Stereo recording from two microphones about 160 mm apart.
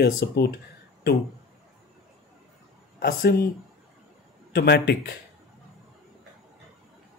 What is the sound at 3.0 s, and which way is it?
Speech, 70° left (ahead or behind).